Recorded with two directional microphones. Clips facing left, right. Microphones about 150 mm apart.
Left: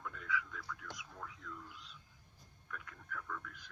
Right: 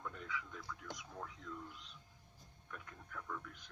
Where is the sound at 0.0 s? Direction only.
25° right (ahead or behind).